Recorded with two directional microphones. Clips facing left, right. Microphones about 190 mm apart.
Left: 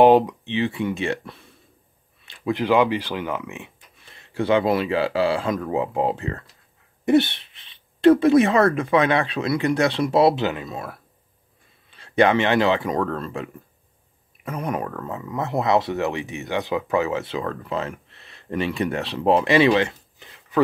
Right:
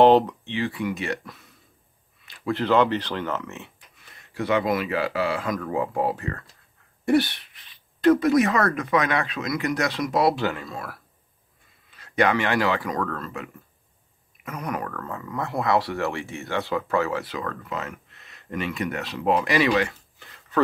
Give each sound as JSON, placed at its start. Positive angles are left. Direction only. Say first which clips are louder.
{"t": 0.0, "sound": "speech", "louder": "left 2 dB", "side_deg": 10}
{"t": 2.2, "sound": "a sound", "louder": "left 3 dB", "side_deg": 25}
{"t": 2.5, "sound": "speech", "louder": "left 1 dB", "side_deg": 10}
{"t": 4.1, "sound": "speech", "louder": "left 4 dB", "side_deg": 25}